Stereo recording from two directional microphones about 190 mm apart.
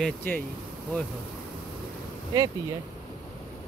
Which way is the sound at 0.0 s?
10° left (ahead or behind).